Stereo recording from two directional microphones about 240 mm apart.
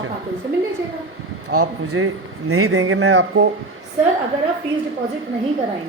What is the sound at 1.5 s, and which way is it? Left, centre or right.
A woman's voice, right.